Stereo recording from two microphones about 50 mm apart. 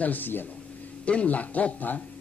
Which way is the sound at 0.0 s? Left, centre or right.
Left.